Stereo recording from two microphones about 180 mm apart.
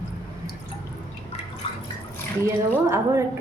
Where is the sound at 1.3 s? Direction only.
35° left (ahead or behind).